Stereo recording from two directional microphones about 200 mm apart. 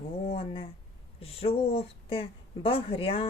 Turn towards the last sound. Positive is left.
turn(degrees=30)  # may be behind; listen again after turning